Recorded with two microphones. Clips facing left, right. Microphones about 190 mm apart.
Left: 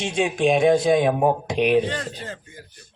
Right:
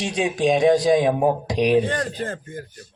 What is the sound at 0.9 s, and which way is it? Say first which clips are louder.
Speech: right 1 dB; 35° right (ahead or behind).